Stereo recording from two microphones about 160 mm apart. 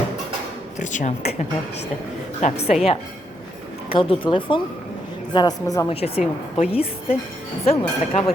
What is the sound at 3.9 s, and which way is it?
A woman's voice, 30° left (ahead or behind).